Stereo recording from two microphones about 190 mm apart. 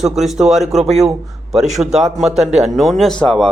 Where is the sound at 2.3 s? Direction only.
35° right (ahead or behind).